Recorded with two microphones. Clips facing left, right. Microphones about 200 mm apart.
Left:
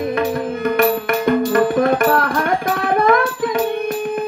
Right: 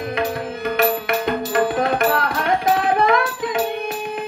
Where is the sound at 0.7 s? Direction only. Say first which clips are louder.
Left 2 dB; 50° left (ahead or behind).